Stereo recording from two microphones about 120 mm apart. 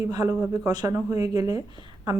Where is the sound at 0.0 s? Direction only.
30° right (ahead or behind).